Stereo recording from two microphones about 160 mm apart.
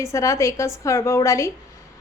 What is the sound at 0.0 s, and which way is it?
A woman's voice, 20° left (ahead or behind).